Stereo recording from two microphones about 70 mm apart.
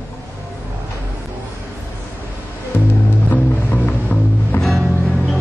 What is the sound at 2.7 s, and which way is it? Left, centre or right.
Music, left.